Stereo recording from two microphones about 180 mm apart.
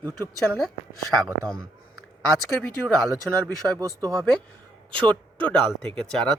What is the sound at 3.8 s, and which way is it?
Speech, 20° right (ahead or behind).